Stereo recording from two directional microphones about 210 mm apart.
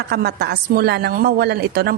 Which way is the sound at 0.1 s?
50° right (ahead or behind).